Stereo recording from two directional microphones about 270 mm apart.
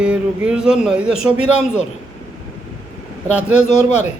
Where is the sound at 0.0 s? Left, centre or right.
Centre.